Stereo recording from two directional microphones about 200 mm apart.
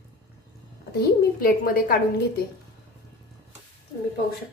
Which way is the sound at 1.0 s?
50° left (ahead or behind).